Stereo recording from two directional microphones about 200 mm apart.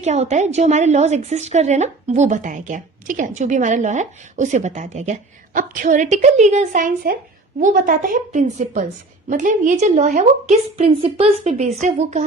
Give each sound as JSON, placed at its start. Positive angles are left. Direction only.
{"t": 0.0, "sound": "a woman's voice", "side_deg": -35}